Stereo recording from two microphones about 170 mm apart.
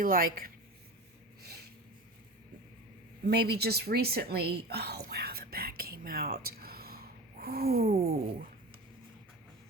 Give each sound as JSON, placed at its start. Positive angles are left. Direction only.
{"t": 0.0, "sound": "a woman's voice", "side_deg": -60}
{"t": 1.4, "sound": "a sound", "side_deg": -70}
{"t": 3.2, "sound": "a woman's voice", "side_deg": -70}